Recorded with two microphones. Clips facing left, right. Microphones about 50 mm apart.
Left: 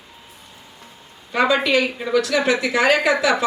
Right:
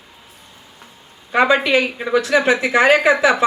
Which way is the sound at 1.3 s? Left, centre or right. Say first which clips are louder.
Right 3 dB; right.